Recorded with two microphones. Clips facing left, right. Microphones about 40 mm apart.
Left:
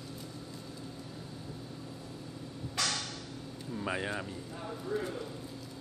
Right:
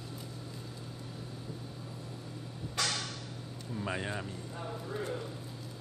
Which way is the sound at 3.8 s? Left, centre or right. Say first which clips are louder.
Left 1 dB; centre.